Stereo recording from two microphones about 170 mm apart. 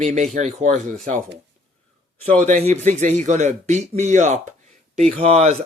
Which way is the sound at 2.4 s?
45° right (ahead or behind).